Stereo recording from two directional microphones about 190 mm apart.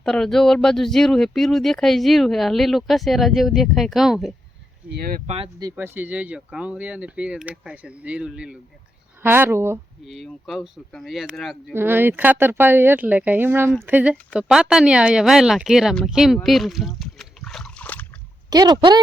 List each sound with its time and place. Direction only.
0.0 s speech: 5° left (ahead or behind)
4.9 s speech: 55° right (ahead or behind)
5.2 s speech: 30° right (ahead or behind)
5.7 s speech: 10° right (ahead or behind)
10.1 s speech: centre (ahead or behind)
11.7 s speech: 10° right (ahead or behind); by 18.0 s 5° left (ahead or behind)
18.5 s speech: 20° right (ahead or behind)